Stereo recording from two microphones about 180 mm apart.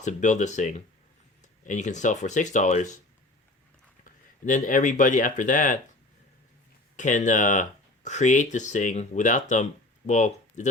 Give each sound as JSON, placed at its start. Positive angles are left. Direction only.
{"t": 0.0, "sound": "speech", "side_deg": 45}
{"t": 4.0, "sound": "speech", "side_deg": 45}
{"t": 6.9, "sound": "speech", "side_deg": 45}